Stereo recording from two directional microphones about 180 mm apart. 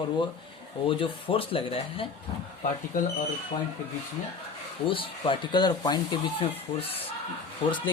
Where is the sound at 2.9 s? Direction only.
45° left (ahead or behind).